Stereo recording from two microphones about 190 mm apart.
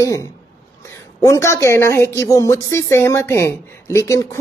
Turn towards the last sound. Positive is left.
turn(degrees=15)  # may be behind; listen again after turning